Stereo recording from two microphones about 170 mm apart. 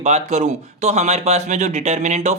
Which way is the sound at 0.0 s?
40° right (ahead or behind).